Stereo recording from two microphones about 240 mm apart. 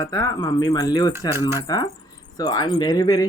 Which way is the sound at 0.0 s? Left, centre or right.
Centre.